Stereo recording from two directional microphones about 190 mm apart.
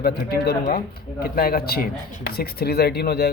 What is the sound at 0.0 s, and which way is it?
Speech, 55° left (ahead or behind).